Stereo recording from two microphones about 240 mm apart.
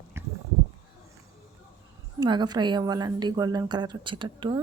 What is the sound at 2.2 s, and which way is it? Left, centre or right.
A woman's voice, centre.